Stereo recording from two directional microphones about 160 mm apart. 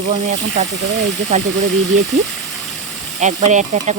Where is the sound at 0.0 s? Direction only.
45° right (ahead or behind).